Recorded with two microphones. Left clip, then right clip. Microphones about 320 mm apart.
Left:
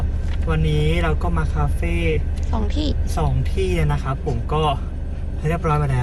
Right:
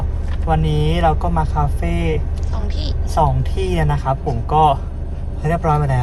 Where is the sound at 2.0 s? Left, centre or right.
Centre.